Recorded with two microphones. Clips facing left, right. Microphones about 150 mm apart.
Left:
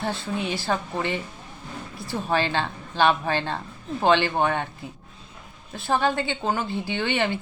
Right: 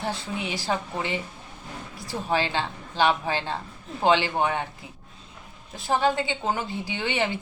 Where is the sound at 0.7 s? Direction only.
15° right (ahead or behind).